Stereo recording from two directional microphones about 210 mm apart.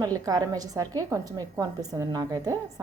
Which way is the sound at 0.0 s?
15° right (ahead or behind).